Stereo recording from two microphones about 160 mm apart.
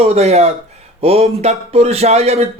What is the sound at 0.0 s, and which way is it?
Speech, 40° right (ahead or behind).